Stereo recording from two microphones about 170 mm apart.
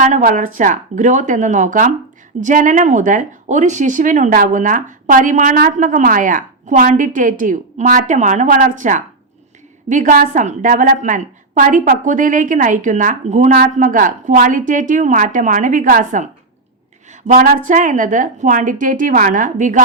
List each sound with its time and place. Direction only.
0.0 s speech: 50° right (ahead or behind)